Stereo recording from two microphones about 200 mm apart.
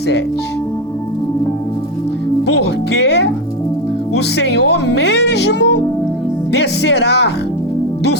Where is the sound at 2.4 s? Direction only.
55° left (ahead or behind).